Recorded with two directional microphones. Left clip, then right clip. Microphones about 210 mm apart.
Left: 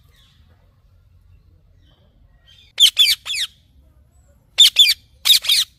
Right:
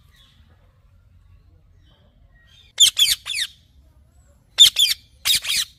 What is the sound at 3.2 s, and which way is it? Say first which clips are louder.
Squawk: left 2 dB; 55° left (ahead or behind).